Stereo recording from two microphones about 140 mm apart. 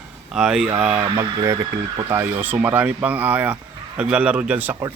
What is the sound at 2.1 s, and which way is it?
Speech, 15° right (ahead or behind).